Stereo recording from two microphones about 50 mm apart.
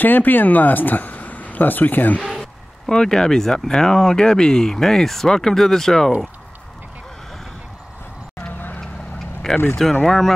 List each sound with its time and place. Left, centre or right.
0.0 s speech: left
2.9 s speech: centre
9.5 s speech: centre